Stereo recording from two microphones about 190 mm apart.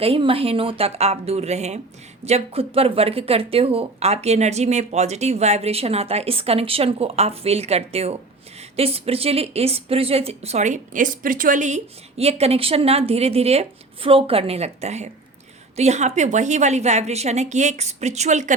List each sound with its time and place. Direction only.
0.0 s a woman's voice: 30° right (ahead or behind)